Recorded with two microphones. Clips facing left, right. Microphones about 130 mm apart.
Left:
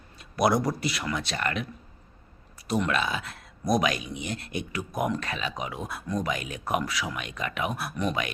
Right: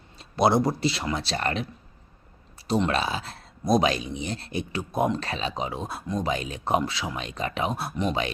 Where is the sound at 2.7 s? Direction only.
30° right (ahead or behind).